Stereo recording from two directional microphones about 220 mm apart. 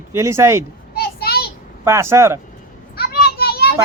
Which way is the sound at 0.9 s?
45° left (ahead or behind).